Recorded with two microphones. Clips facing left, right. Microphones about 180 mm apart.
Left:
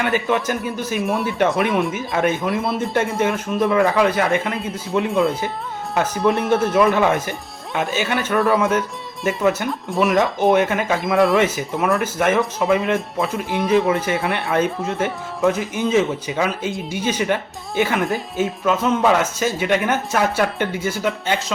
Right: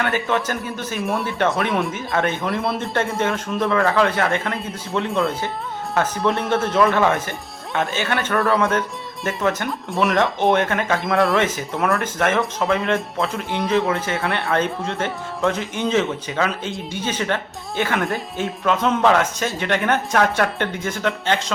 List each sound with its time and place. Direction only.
0.0 s speech: 10° left (ahead or behind)
3.7 s a woman's voice: 15° left (ahead or behind)
4.5 s speech: centre (ahead or behind)
6.9 s speech: 20° left (ahead or behind)
7.9 s speech: 5° left (ahead or behind)
10.9 s a woman's voice: centre (ahead or behind)